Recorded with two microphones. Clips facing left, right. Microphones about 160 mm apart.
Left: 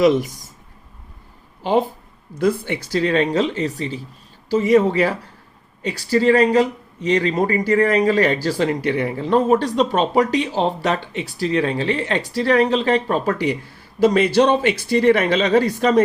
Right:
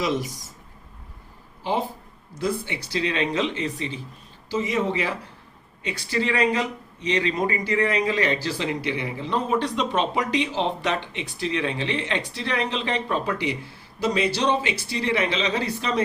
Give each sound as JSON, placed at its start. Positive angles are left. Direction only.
{"t": 0.0, "sound": "speech", "side_deg": 55}
{"t": 2.4, "sound": "speech", "side_deg": 50}
{"t": 4.4, "sound": "speech", "side_deg": 50}